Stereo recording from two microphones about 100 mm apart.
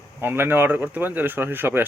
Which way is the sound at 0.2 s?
20° right (ahead or behind).